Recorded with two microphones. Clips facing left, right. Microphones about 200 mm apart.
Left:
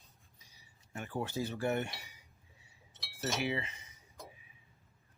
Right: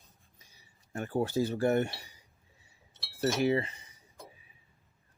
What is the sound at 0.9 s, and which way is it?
Speech, 40° right (ahead or behind).